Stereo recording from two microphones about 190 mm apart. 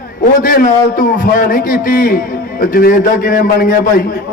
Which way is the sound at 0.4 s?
45° left (ahead or behind).